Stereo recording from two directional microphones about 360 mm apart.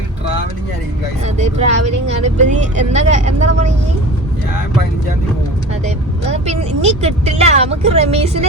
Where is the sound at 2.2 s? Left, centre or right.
Centre.